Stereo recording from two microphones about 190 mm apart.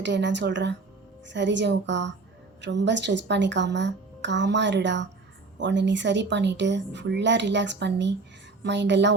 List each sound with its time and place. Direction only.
0.0 s a woman's voice: 70° right (ahead or behind)